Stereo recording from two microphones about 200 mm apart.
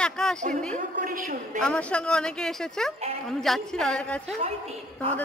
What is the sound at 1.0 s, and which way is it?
Speech, 40° right (ahead or behind).